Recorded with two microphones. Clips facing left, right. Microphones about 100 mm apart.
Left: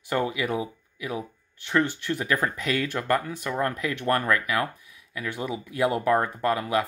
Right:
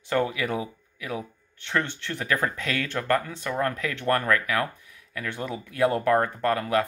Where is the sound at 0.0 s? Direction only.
10° left (ahead or behind).